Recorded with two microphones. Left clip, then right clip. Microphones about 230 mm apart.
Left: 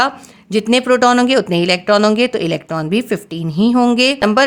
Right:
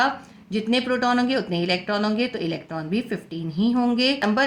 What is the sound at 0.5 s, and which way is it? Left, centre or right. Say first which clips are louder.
Speech: left 10 dB; left.